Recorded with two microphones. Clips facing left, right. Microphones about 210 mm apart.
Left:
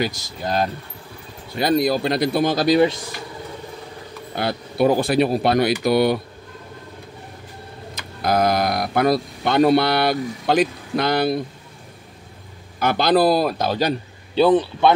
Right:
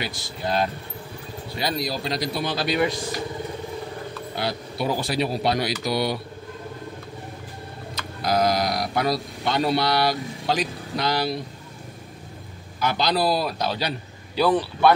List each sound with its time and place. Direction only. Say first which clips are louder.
0.0 s a man's voice: left 5 dB; 45° left (ahead or behind)
4.4 s speech: left 8 dB; 55° left (ahead or behind)
8.2 s speech: left 3 dB; 55° left (ahead or behind)
12.7 s a man's voice: left 6 dB; 55° left (ahead or behind)
14.3 s speech: left 5 dB; 20° left (ahead or behind)